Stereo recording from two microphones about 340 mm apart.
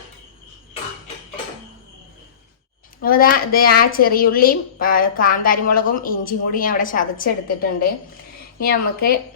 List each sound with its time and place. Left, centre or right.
3.0 s a woman's voice: left